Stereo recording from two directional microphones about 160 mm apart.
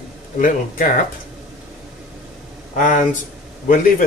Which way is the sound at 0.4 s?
55° left (ahead or behind).